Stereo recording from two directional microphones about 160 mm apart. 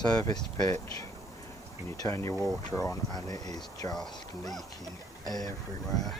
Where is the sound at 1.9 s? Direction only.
20° left (ahead or behind).